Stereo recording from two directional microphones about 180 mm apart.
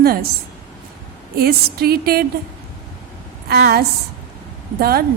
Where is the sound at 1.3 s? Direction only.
60° right (ahead or behind).